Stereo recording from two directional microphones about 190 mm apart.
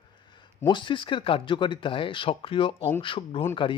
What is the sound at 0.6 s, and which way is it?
Speech, 25° left (ahead or behind).